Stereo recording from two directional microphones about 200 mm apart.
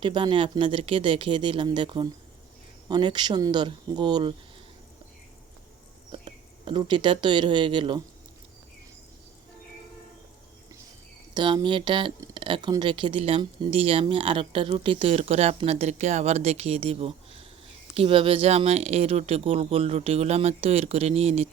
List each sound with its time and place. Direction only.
0.0 s speech: 25° right (ahead or behind)
6.1 s speech: 25° right (ahead or behind)
11.3 s speech: 20° right (ahead or behind)